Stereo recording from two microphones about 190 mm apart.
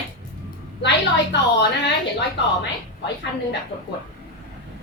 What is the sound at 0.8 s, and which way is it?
Speech, 65° left (ahead or behind).